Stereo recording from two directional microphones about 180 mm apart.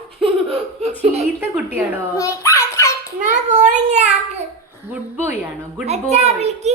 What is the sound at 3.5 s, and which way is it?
Speech, 40° right (ahead or behind).